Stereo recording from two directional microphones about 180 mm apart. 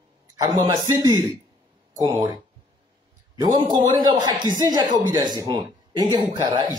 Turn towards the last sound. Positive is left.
turn(degrees=-25)  # may be behind; listen again after turning